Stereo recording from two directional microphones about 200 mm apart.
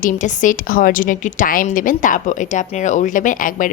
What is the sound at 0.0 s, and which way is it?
A woman's voice, 40° left (ahead or behind).